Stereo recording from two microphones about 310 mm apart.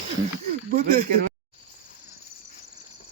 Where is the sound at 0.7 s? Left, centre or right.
Right.